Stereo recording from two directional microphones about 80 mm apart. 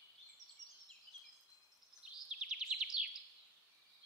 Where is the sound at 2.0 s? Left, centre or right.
Centre.